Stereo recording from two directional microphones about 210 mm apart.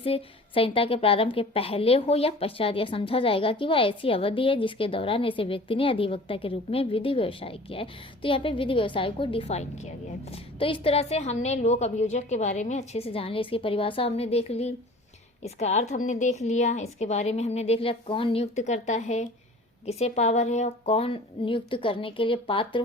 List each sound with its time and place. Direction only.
0.0 s a woman's voice: 25° left (ahead or behind)